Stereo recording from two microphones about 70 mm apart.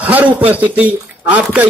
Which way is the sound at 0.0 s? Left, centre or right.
Right.